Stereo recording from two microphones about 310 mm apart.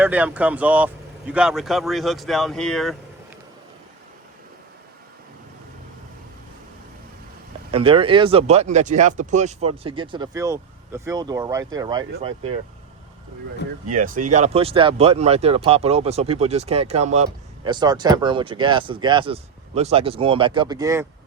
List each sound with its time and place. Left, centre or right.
0.0 s speech: centre
7.7 s speech: centre
13.9 s speech: right; by 21.1 s centre